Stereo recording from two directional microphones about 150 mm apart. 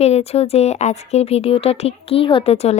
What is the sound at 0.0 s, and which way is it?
A woman's voice, 45° left (ahead or behind).